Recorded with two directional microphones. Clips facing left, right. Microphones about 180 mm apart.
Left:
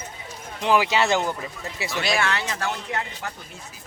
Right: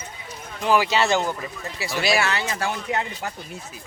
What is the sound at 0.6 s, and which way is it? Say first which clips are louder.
Speech: even; 20° left (ahead or behind).